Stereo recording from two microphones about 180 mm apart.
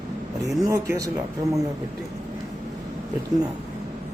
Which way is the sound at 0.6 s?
15° right (ahead or behind).